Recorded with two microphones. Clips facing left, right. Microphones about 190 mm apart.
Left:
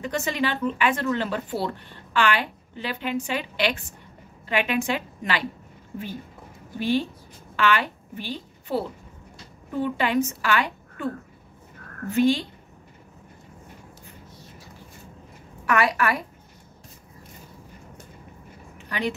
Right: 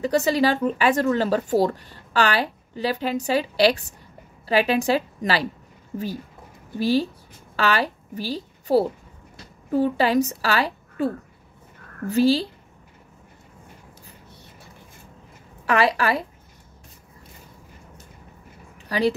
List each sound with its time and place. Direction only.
0.0 s speech: 35° right (ahead or behind)
6.8 s a woman's voice: 35° right (ahead or behind)
15.6 s a woman's voice: 30° right (ahead or behind)
18.9 s a woman's voice: 35° right (ahead or behind)